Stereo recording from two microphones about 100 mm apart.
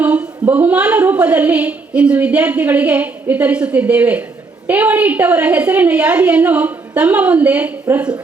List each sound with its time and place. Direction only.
0.0 s a woman's voice: 15° right (ahead or behind)